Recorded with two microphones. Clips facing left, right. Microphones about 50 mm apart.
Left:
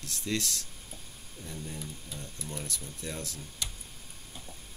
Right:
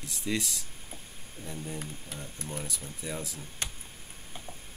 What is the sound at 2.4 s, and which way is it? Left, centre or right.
Speech, right.